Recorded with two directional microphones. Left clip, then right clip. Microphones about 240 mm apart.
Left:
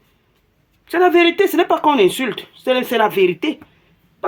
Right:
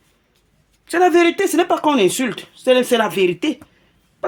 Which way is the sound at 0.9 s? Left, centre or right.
Right.